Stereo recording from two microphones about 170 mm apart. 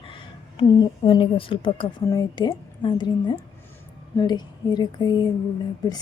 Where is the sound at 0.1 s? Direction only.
30° left (ahead or behind).